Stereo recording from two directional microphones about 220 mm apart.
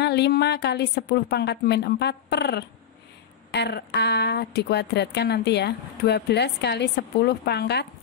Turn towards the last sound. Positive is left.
turn(degrees=50)  # may be behind; listen again after turning